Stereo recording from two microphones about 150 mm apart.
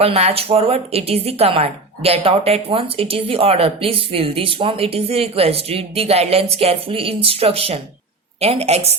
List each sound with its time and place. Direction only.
0.0 s a woman's voice: 45° right (ahead or behind)